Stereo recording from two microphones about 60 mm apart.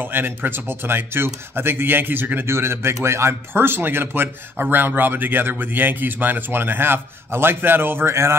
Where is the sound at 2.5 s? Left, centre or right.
Right.